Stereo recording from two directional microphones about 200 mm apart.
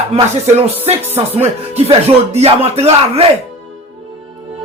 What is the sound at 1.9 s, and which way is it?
Speech, 30° right (ahead or behind).